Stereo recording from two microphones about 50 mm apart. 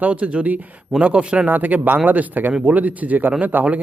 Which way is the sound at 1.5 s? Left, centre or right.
Right.